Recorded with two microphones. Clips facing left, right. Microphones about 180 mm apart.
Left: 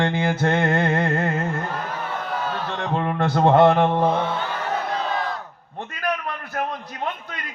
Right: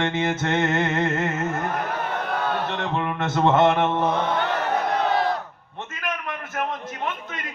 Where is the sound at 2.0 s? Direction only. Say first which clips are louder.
Right 1 dB; 65° right (ahead or behind).